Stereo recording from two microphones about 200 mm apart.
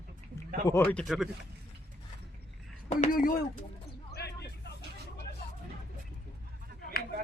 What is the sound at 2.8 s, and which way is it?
Speech, 40° left (ahead or behind).